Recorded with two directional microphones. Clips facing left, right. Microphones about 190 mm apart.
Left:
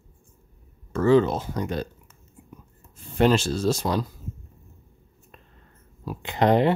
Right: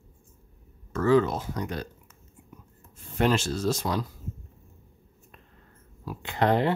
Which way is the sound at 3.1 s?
30° left (ahead or behind).